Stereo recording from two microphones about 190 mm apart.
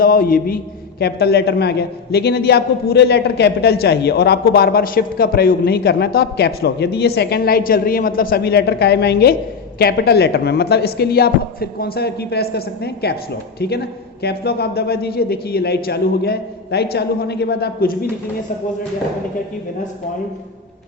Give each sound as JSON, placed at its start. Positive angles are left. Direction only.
{"t": 0.0, "sound": "a man's voice", "side_deg": 50}